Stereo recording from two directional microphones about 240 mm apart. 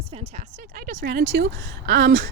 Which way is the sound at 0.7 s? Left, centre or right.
Right.